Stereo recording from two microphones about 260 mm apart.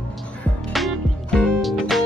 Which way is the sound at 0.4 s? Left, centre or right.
Centre.